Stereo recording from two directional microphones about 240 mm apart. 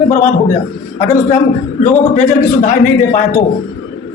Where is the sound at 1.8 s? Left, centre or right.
Left.